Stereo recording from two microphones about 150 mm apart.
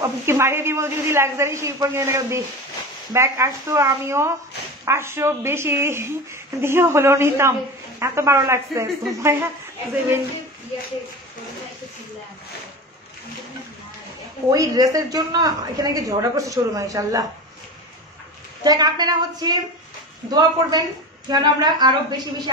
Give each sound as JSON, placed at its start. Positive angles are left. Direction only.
{"t": 0.2, "sound": "a woman's voice", "side_deg": -15}
{"t": 14.5, "sound": "a woman's voice", "side_deg": -25}
{"t": 18.6, "sound": "a woman's voice", "side_deg": -25}